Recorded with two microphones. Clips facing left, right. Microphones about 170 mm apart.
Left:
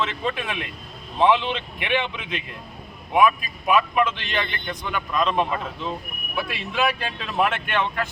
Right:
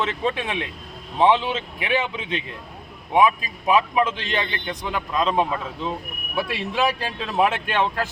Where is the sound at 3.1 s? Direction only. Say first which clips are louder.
Right 1 dB; 30° right (ahead or behind).